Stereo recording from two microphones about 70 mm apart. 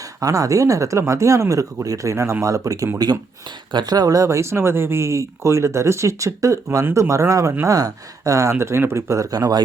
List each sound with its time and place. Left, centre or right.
0.2 s speech: right
3.7 s speech: right
9.3 s speech: right